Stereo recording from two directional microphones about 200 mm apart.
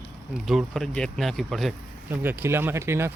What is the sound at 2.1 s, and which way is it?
Speech, 10° right (ahead or behind).